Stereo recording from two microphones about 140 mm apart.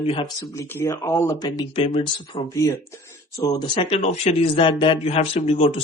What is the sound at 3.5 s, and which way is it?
Speech, 35° left (ahead or behind).